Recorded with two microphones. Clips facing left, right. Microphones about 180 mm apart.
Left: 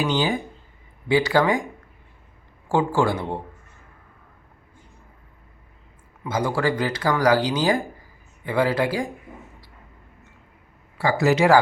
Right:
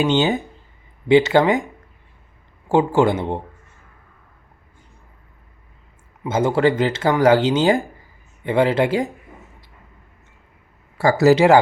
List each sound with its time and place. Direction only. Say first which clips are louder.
0.0 s speech: right 5 dB; 25° right (ahead or behind)
2.6 s speech: right 5 dB; 20° right (ahead or behind)
6.2 s speech: right 6 dB; 25° right (ahead or behind)
10.9 s speech: right 6 dB; 40° right (ahead or behind)